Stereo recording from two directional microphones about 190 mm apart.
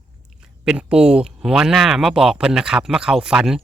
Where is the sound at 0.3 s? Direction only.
5° right (ahead or behind).